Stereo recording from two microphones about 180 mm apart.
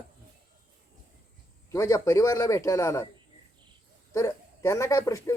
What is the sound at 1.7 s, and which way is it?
Speech, 15° left (ahead or behind).